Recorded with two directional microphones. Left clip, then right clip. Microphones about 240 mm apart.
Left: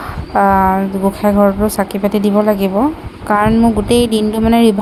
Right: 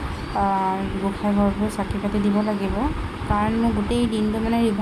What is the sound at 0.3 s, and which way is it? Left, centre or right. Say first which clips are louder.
A woman's voice: left 11 dB; left.